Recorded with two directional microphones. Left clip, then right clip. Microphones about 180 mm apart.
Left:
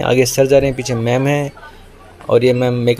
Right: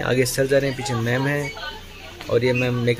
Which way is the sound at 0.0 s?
15° left (ahead or behind).